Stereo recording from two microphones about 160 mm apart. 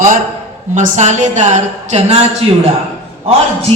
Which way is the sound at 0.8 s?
50° right (ahead or behind).